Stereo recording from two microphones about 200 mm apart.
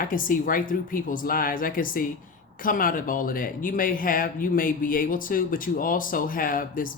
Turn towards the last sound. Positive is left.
turn(degrees=45)  # may be behind; listen again after turning